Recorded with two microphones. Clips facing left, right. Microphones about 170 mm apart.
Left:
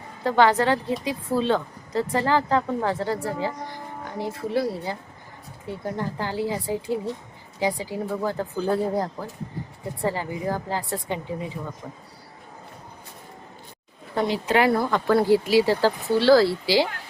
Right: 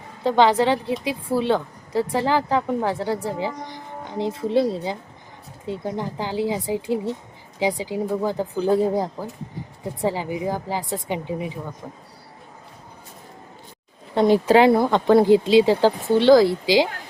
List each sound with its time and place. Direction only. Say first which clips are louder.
0.2 s a woman's voice: right 2 dB; 20° right (ahead or behind)
14.5 s speech: right 3 dB; 25° right (ahead or behind)